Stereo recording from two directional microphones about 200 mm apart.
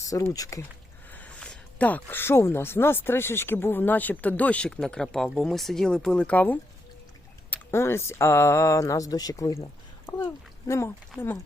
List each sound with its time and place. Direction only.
0.1 s speech: 15° left (ahead or behind)